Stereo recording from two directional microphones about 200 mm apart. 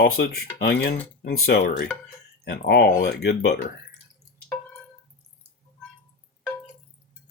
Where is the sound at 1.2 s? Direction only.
50° left (ahead or behind).